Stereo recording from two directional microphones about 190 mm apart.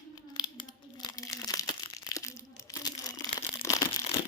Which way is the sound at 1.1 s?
20° left (ahead or behind).